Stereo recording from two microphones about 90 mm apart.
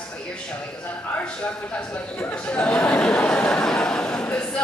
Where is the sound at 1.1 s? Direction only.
10° left (ahead or behind).